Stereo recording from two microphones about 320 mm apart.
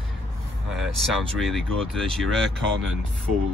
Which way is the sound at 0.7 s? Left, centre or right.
Centre.